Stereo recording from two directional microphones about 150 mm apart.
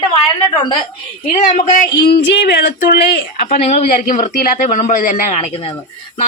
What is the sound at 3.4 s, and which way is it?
A man's voice, 55° left (ahead or behind).